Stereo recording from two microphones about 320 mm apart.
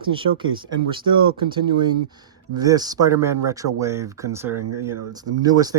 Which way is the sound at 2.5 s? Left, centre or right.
Centre.